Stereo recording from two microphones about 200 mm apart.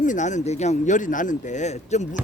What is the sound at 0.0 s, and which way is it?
Speech, 40° left (ahead or behind).